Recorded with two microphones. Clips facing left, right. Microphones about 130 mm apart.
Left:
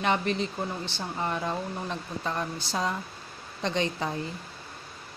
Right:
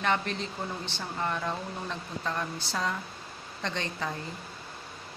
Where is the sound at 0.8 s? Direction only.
15° left (ahead or behind).